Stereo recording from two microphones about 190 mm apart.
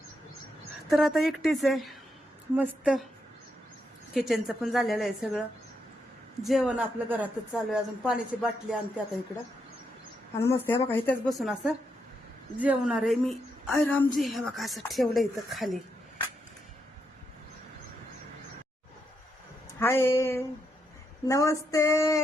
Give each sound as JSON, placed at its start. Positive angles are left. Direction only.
{"t": 0.9, "sound": "speech", "side_deg": 0}
{"t": 4.1, "sound": "speech", "side_deg": 0}
{"t": 6.4, "sound": "speech", "side_deg": 0}
{"t": 10.3, "sound": "female singing", "side_deg": 15}
{"t": 11.3, "sound": "speech", "side_deg": 0}
{"t": 19.8, "sound": "female singing", "side_deg": 10}